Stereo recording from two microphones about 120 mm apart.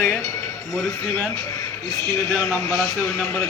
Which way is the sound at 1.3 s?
30° left (ahead or behind).